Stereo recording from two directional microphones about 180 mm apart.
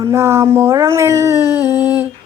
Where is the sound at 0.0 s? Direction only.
15° right (ahead or behind).